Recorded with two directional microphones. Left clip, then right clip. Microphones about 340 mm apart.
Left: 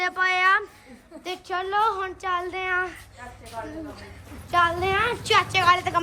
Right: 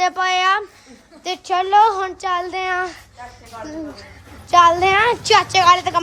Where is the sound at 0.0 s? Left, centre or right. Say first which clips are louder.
Right 4 dB; centre.